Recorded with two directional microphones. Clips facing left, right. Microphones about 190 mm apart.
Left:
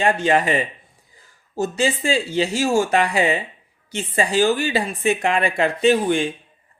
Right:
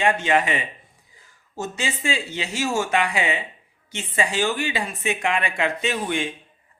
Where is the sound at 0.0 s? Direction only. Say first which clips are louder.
Left 3 dB; 35° left (ahead or behind).